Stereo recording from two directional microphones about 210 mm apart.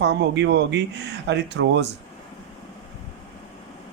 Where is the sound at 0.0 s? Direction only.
55° right (ahead or behind).